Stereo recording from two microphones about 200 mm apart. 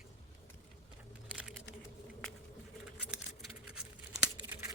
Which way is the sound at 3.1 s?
5° right (ahead or behind).